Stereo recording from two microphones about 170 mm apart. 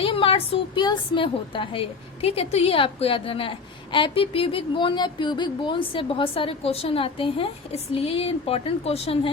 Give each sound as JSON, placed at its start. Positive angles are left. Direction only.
{"t": 0.0, "sound": "a woman's voice", "side_deg": 30}